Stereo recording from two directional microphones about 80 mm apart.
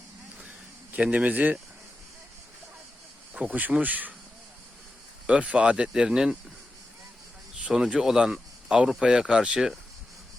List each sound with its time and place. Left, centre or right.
0.9 s speech: centre
3.3 s speech: centre
5.2 s speech: centre
7.6 s speech: centre